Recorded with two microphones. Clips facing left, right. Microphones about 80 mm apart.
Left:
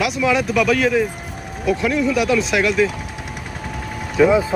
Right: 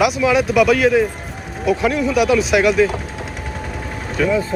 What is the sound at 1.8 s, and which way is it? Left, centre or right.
Speech, right.